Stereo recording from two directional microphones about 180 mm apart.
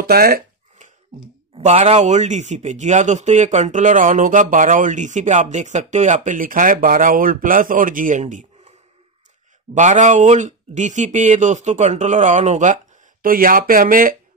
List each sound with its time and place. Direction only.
0.0 s a sound: 55° right (ahead or behind)
1.6 s speech: 35° right (ahead or behind)
9.8 s speech: 40° right (ahead or behind)